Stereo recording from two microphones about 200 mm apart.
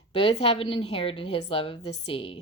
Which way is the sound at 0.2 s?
30° left (ahead or behind).